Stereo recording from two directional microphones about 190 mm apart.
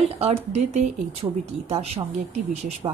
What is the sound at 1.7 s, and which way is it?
Speech, 30° right (ahead or behind).